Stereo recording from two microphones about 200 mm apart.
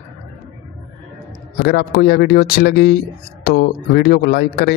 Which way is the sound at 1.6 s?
50° left (ahead or behind).